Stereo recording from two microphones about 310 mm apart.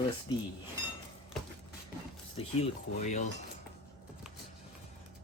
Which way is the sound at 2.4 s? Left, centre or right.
Left.